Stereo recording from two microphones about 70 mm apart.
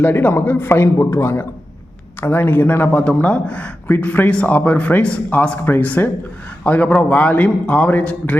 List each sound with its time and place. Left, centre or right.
0.0 s a man's voice: left